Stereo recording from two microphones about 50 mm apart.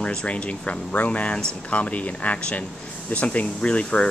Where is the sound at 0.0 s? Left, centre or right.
Left.